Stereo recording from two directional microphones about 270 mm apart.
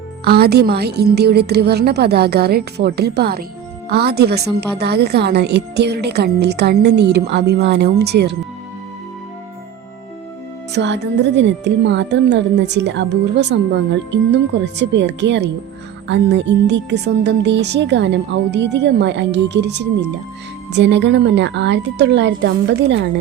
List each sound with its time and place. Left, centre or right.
0.3 s speech: right
10.7 s speech: right